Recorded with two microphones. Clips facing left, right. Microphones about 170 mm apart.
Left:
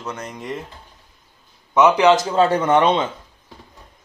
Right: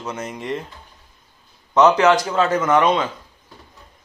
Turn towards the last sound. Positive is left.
turn(degrees=25)  # may be behind; listen again after turning